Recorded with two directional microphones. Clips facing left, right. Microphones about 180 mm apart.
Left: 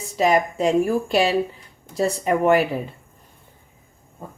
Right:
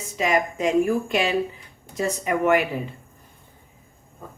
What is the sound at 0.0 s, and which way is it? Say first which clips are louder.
Speech: left 4 dB; 35° left (ahead or behind).